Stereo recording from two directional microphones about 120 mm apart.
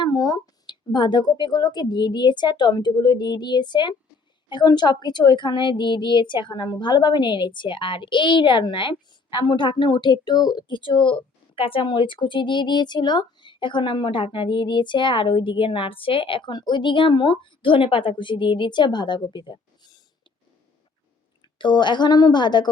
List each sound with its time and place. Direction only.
0.0 s a woman's voice: 35° left (ahead or behind)
21.6 s a woman's voice: 40° left (ahead or behind)